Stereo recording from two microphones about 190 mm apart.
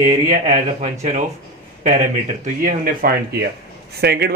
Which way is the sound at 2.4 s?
45° right (ahead or behind).